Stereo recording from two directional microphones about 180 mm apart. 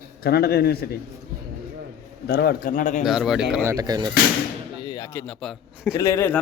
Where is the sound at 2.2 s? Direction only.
60° left (ahead or behind); by 3.0 s 45° left (ahead or behind).